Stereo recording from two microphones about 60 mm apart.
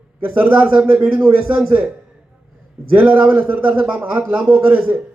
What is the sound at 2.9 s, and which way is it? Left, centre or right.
Speech, right.